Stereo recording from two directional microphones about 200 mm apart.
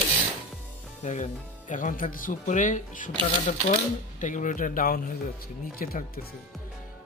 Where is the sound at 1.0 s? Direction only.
35° left (ahead or behind).